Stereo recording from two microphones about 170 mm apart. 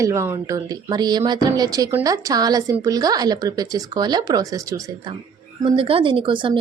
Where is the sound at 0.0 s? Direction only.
15° right (ahead or behind).